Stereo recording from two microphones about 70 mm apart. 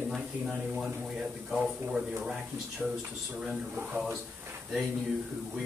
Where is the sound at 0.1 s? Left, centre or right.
Centre.